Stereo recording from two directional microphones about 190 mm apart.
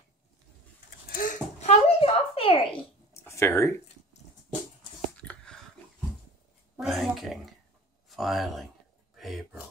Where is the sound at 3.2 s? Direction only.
15° left (ahead or behind).